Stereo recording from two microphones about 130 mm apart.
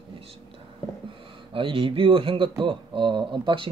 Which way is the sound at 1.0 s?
40° right (ahead or behind).